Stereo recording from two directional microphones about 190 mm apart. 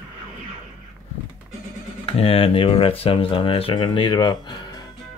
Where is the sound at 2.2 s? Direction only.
30° left (ahead or behind).